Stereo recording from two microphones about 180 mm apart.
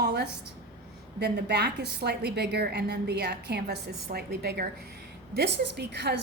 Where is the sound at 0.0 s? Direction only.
65° right (ahead or behind).